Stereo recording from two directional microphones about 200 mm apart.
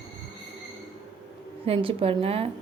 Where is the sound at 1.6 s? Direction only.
30° right (ahead or behind).